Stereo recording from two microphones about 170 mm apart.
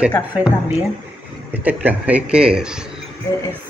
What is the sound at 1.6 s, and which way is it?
Speech, 10° right (ahead or behind).